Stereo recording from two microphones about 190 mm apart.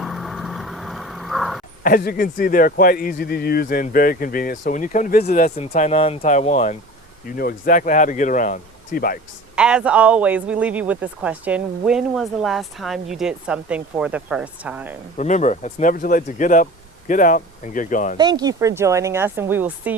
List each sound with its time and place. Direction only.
0.0 s vehicle: centre (ahead or behind)
1.8 s speech: 50° left (ahead or behind); by 6.7 s 35° left (ahead or behind)
7.3 s speech: 50° left (ahead or behind)
9.6 s speech: 5° right (ahead or behind)
15.2 s speech: 40° left (ahead or behind)
18.2 s speech: 20° right (ahead or behind)